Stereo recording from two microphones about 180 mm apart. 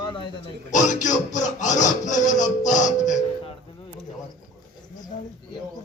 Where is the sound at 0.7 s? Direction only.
45° left (ahead or behind).